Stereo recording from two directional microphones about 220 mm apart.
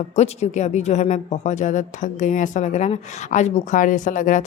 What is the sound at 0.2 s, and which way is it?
A woman's voice, 30° left (ahead or behind).